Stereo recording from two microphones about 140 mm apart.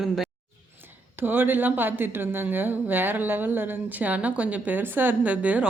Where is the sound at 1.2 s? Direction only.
15° right (ahead or behind).